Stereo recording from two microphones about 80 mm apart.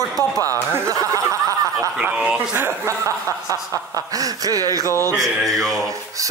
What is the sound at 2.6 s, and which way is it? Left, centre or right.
Speech, right.